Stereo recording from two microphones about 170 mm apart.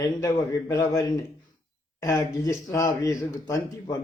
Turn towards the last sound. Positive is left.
turn(degrees=20)  # may be behind; listen again after turning